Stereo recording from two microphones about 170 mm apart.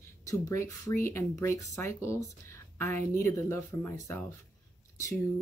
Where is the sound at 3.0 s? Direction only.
45° right (ahead or behind).